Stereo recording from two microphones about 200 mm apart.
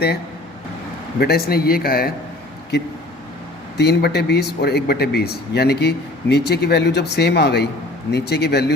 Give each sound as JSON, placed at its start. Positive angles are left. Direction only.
{"t": 1.2, "sound": "speech", "side_deg": 50}
{"t": 3.8, "sound": "speech", "side_deg": 55}